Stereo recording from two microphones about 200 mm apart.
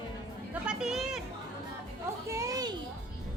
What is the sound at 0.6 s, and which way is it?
Speech, 5° right (ahead or behind).